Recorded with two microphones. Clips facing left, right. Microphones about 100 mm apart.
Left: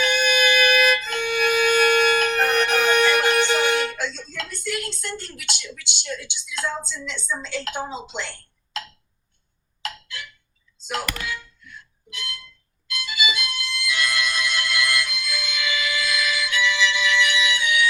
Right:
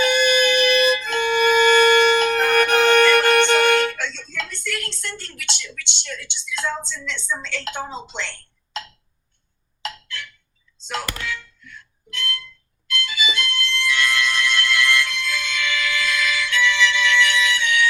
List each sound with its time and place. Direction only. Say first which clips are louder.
0.0 s music: right 3 dB; 55° right (ahead or behind)
3.9 s a sound: even; 10° left (ahead or behind)
7.7 s speech: even; 10° left (ahead or behind)
10.8 s thunk: even; 10° left (ahead or behind)
12.9 s music: right 2 dB; 10° left (ahead or behind)